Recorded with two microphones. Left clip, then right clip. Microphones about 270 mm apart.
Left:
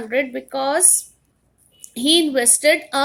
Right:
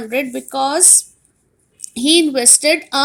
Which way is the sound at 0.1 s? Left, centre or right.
Centre.